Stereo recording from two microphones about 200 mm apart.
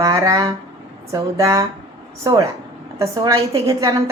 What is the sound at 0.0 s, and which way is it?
A woman's voice, 15° right (ahead or behind).